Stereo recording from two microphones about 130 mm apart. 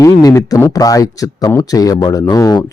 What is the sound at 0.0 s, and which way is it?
Speech, 25° left (ahead or behind).